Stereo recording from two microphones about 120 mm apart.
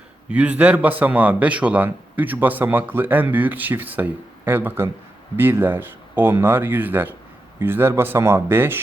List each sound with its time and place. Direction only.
0.3 s a man's voice: 10° right (ahead or behind)